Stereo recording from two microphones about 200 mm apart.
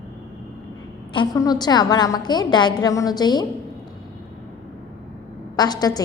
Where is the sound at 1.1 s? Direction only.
20° left (ahead or behind).